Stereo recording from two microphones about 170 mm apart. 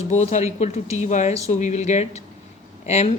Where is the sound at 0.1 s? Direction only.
45° left (ahead or behind).